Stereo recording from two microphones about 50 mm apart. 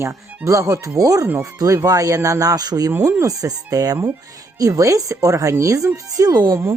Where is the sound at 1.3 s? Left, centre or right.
Right.